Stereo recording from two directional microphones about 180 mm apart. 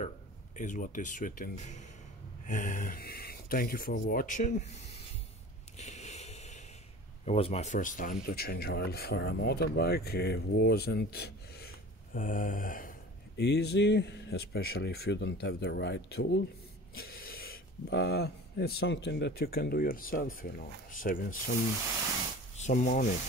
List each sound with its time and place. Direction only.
0.6 s speech: 45° left (ahead or behind)
5.8 s a sound: 40° left (ahead or behind)
7.2 s speech: 35° left (ahead or behind); by 12.9 s 50° left (ahead or behind)
13.4 s speech: 65° left (ahead or behind); by 21.4 s 50° left (ahead or behind)
22.6 s speech: 45° left (ahead or behind)